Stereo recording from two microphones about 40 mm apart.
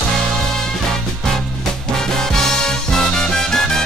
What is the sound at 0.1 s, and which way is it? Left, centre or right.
Music, centre.